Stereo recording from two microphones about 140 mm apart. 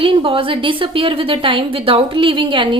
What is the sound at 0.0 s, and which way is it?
A woman's voice, 40° right (ahead or behind).